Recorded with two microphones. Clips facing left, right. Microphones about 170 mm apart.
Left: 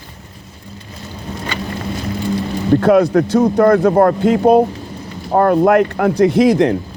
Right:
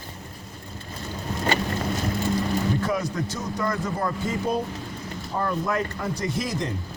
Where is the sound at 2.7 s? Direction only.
70° left (ahead or behind).